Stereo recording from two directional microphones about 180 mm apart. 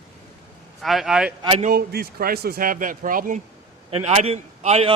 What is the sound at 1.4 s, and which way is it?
Speech, 30° right (ahead or behind).